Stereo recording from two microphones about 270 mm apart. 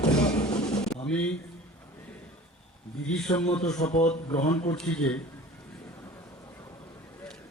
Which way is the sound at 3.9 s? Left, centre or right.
Left.